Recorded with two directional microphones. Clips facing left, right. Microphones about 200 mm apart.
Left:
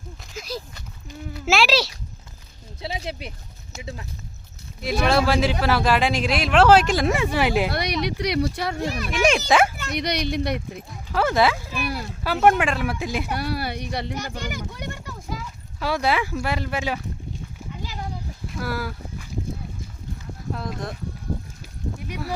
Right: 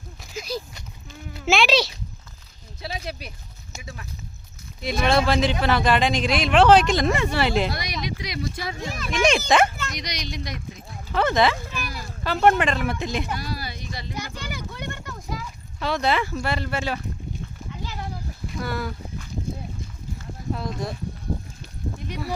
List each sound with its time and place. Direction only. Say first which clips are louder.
0.3 s a sound: right 2 dB; centre (ahead or behind)
2.8 s speech: left 2 dB; 25° left (ahead or behind)
4.8 s speech: left 1 dB; 5° left (ahead or behind)
7.7 s speech: left 5 dB; 65° left (ahead or behind)
9.0 s speech: right 1 dB; 10° left (ahead or behind)
9.9 s speech: left 9 dB; 60° left (ahead or behind)
11.1 s speech: even; 5° left (ahead or behind)
13.3 s speech: left 5 dB; 65° left (ahead or behind); by 14.7 s 45° left (ahead or behind)
14.7 s speech: even; 10° left (ahead or behind)
18.4 s speech: even; centre (ahead or behind)
20.5 s speech: right 2 dB; centre (ahead or behind)
21.9 s a sound: right 1 dB; 10° left (ahead or behind)